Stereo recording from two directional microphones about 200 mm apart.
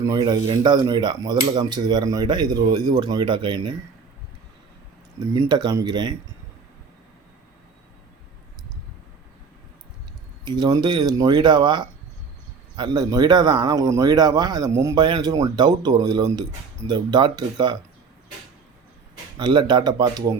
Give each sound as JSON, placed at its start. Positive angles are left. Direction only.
{"t": 0.0, "sound": "speech", "side_deg": -20}
{"t": 5.3, "sound": "speech", "side_deg": -20}
{"t": 10.4, "sound": "speech", "side_deg": -20}
{"t": 19.4, "sound": "speech", "side_deg": -20}